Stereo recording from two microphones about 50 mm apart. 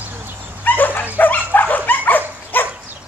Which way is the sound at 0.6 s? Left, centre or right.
Left.